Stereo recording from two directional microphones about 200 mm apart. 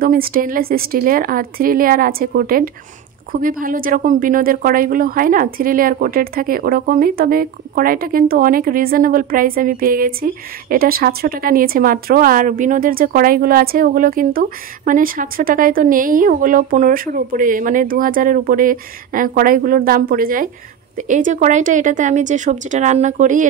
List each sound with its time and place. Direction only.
0.0 s a woman's voice: 45° right (ahead or behind)